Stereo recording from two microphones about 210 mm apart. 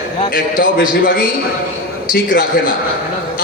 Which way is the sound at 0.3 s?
40° left (ahead or behind).